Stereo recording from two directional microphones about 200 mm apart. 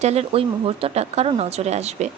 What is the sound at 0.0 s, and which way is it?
A woman's voice, 30° right (ahead or behind).